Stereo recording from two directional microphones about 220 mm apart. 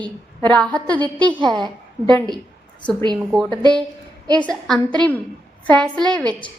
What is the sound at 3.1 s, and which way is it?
A woman's voice, centre (ahead or behind).